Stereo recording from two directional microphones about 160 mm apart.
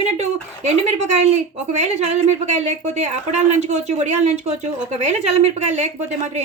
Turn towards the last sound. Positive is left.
turn(degrees=-45)  # may be behind; listen again after turning